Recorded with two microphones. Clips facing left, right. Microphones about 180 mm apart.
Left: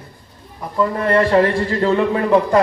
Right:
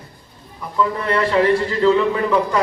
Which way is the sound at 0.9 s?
50° left (ahead or behind).